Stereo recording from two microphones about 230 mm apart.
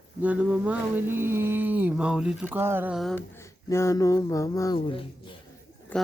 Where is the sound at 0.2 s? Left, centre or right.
Centre.